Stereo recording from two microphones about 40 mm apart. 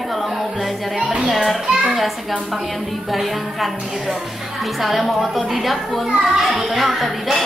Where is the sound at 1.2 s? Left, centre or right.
Centre.